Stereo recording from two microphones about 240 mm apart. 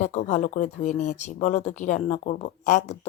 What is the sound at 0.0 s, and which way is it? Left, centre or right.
Speech, left.